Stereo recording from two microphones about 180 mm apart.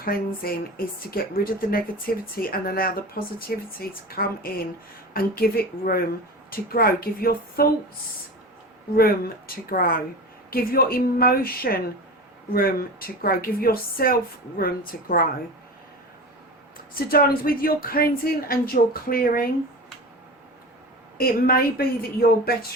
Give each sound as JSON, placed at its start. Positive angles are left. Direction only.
{"t": 0.0, "sound": "speech", "side_deg": 55}
{"t": 9.0, "sound": "speech", "side_deg": 55}
{"t": 16.9, "sound": "speech", "side_deg": 55}
{"t": 21.2, "sound": "speech", "side_deg": 55}